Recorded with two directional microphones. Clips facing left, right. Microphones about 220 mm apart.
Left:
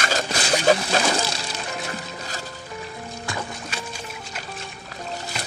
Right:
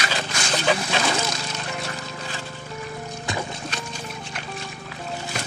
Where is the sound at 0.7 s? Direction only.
40° left (ahead or behind).